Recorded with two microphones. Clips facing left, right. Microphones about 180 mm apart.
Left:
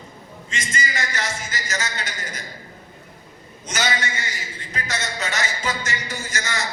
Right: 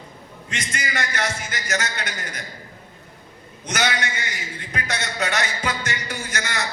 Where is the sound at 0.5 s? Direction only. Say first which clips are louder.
Even; 60° right (ahead or behind).